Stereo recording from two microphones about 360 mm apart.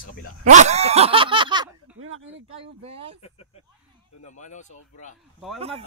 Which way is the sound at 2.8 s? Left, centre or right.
Centre.